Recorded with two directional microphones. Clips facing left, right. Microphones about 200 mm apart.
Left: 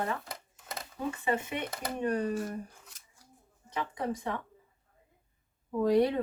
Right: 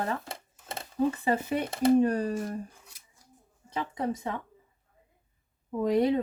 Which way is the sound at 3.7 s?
25° right (ahead or behind).